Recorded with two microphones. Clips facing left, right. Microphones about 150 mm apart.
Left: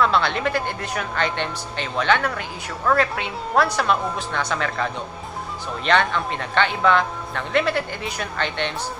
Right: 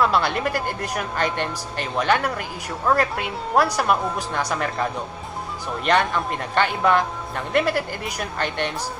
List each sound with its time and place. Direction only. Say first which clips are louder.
0.0 s speech: even; 10° right (ahead or behind)
5.9 s speech: even; 10° right (ahead or behind)